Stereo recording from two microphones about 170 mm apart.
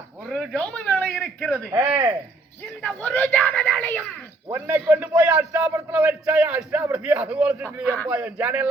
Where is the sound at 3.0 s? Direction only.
10° left (ahead or behind).